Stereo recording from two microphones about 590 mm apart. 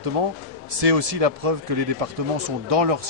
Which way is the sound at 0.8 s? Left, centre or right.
Right.